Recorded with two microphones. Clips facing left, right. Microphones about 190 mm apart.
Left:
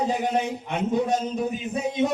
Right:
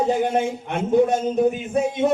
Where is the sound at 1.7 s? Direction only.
55° right (ahead or behind).